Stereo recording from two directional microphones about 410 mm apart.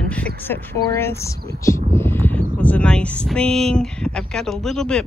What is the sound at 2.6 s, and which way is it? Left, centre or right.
Speech, centre.